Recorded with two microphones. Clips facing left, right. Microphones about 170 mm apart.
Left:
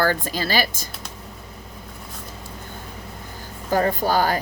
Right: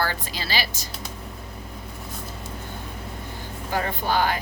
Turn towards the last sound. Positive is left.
turn(degrees=40)  # may be behind; listen again after turning